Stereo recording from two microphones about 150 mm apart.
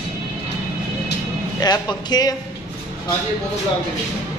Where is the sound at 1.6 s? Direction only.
25° left (ahead or behind).